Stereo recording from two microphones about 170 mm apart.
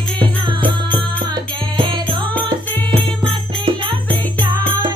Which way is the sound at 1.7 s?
30° right (ahead or behind).